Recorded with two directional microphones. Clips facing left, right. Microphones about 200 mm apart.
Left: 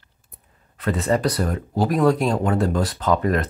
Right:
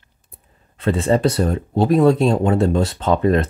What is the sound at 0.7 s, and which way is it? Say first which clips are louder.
Speech: right 4 dB; 25° right (ahead or behind).